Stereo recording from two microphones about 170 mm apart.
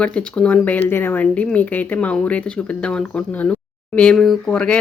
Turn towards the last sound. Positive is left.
turn(degrees=5)  # may be behind; listen again after turning